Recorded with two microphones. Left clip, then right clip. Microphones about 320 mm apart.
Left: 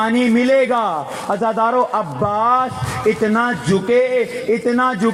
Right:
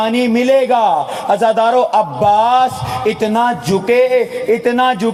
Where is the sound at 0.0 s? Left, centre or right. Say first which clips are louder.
Right 2 dB; right.